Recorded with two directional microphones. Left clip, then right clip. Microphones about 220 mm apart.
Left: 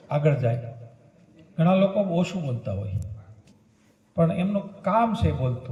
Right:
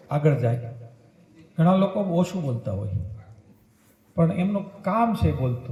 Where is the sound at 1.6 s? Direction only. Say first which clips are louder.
Left 1 dB; 50° right (ahead or behind).